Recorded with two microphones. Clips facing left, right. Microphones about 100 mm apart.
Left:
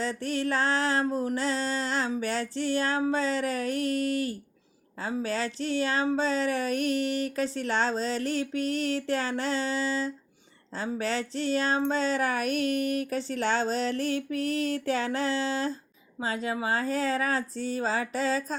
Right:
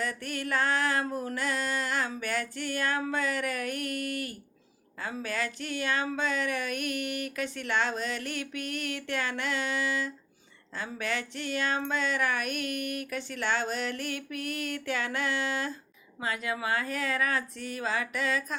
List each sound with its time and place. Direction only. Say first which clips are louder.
0.0 s speech: left 5 dB; 30° left (ahead or behind)